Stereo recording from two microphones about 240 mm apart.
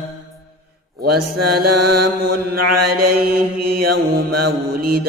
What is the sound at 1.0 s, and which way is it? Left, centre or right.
Mantra, right.